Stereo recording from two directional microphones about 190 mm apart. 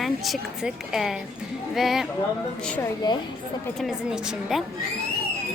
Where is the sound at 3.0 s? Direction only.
20° left (ahead or behind).